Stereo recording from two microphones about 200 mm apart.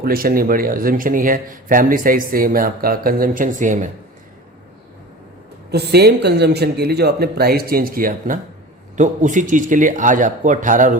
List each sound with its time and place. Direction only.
0.0 s a man's voice: 45° right (ahead or behind)
5.7 s a man's voice: 55° right (ahead or behind)